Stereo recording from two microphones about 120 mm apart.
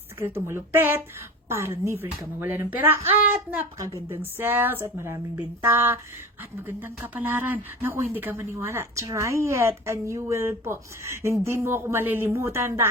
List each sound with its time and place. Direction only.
0.2 s speech: 20° right (ahead or behind)